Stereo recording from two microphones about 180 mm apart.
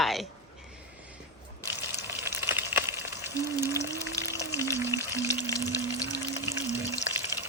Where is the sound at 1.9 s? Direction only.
15° right (ahead or behind).